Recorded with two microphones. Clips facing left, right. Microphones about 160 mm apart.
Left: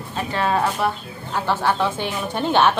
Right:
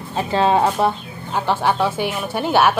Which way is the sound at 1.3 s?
15° right (ahead or behind).